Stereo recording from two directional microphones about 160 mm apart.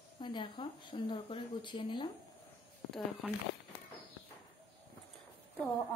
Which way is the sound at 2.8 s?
5° left (ahead or behind).